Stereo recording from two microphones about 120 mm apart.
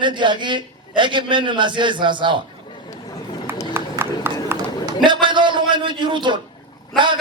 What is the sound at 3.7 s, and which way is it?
Clip-clop, 20° right (ahead or behind).